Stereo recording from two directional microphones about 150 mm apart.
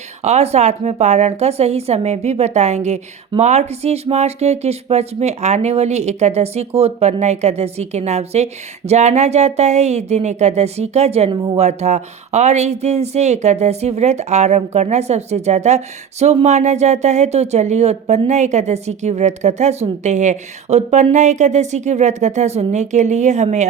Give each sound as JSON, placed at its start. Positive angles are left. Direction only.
{"t": 0.2, "sound": "a woman's voice", "side_deg": -45}